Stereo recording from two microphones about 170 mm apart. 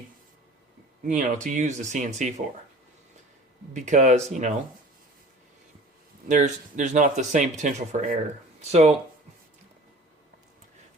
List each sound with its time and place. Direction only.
1.0 s speech: 50° right (ahead or behind)
3.8 s speech: 45° right (ahead or behind)
6.2 s speech: 45° right (ahead or behind)
8.7 s speech: 40° right (ahead or behind)